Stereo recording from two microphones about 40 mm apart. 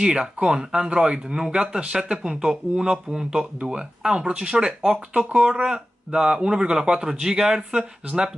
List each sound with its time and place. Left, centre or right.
0.0 s speech: right